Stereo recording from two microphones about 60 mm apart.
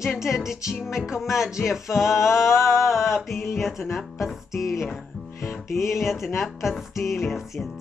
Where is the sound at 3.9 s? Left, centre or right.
Centre.